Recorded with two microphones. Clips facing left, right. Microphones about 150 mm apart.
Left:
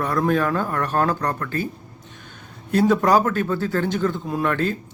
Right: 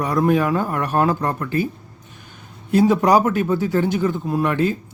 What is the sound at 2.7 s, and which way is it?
Speech, 10° right (ahead or behind).